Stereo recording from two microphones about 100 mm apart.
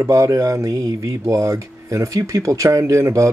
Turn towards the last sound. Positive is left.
turn(degrees=-30)  # may be behind; listen again after turning